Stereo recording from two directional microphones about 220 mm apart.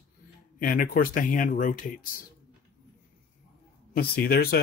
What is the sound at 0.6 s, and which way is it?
Speech, 40° left (ahead or behind).